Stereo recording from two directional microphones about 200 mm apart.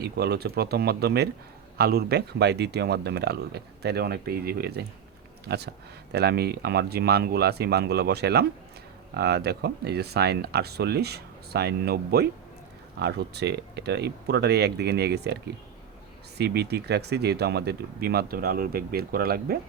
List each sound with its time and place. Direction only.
0.0 s speech: 55° right (ahead or behind)
16.4 s speech: 55° right (ahead or behind)